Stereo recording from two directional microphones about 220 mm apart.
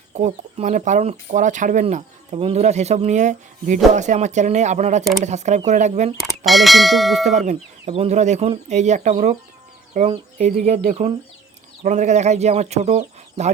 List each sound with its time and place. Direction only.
0.1 s speech: 30° right (ahead or behind)
6.1 s speech: centre (ahead or behind)
7.3 s speech: 30° right (ahead or behind)